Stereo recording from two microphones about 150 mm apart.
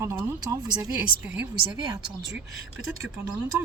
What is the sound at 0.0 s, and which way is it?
Speech, 15° right (ahead or behind).